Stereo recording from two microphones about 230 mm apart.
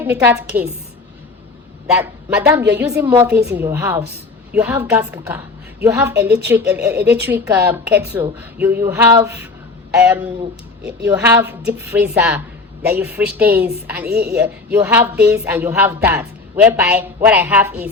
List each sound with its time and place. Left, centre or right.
0.0 s a woman's voice: centre
2.0 s a woman's voice: centre
6.1 s a woman's voice: right
6.5 s a woman's voice: centre
14.0 s a woman's voice: right
14.3 s a woman's voice: centre